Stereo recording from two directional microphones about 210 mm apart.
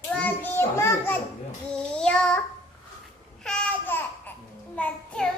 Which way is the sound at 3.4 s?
5° left (ahead or behind).